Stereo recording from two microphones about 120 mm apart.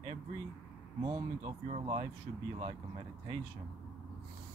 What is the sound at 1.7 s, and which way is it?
Speech, 60° right (ahead or behind).